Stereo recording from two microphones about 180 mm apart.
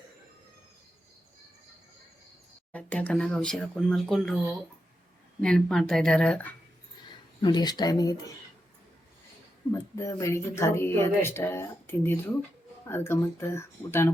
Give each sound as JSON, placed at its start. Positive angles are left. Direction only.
{"t": 2.7, "sound": "speech", "side_deg": 5}
{"t": 7.4, "sound": "speech", "side_deg": 25}
{"t": 9.9, "sound": "speech", "side_deg": 20}